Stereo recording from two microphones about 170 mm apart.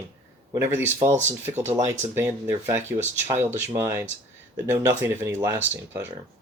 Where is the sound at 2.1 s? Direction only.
15° right (ahead or behind).